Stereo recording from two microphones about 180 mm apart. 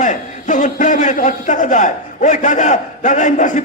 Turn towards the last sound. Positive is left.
turn(degrees=45)  # may be behind; listen again after turning